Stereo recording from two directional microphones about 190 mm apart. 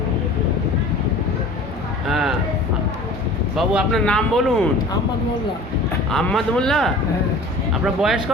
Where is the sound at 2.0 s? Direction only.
Centre (ahead or behind).